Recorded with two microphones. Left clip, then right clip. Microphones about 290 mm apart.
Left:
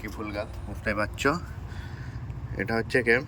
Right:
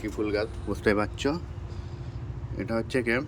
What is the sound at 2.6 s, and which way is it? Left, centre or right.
Speech, centre.